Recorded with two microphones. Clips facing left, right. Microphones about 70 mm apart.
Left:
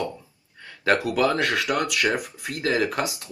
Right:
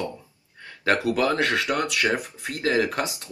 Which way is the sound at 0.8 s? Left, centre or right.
Right.